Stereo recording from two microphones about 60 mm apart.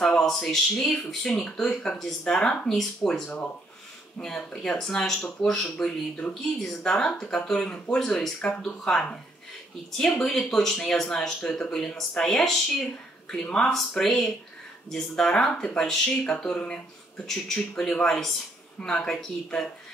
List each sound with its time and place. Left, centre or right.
0.2 s speech: centre
8.4 s speech: centre